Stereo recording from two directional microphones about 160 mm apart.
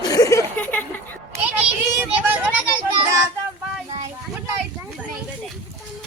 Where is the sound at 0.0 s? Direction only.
20° left (ahead or behind).